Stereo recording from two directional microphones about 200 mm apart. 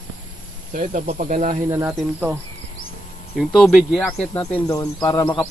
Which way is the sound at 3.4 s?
Centre (ahead or behind).